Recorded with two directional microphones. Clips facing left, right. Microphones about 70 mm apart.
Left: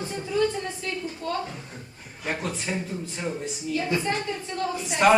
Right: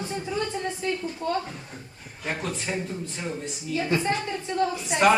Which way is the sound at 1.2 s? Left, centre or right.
Right.